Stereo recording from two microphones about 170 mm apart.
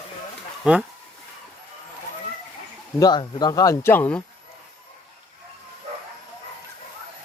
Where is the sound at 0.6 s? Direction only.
5° right (ahead or behind).